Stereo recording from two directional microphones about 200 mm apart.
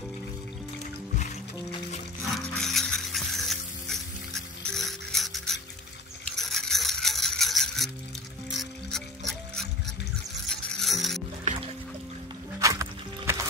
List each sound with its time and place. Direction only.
2.3 s music: centre (ahead or behind)
4.6 s rub: centre (ahead or behind)
6.3 s music: centre (ahead or behind)
10.5 s mechanisms: centre (ahead or behind)
12.5 s music: 15° right (ahead or behind)